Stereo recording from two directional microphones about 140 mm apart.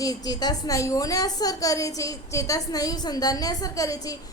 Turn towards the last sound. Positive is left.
turn(degrees=25)  # may be behind; listen again after turning